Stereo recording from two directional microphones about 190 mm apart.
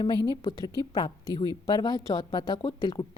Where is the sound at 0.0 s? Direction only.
20° left (ahead or behind).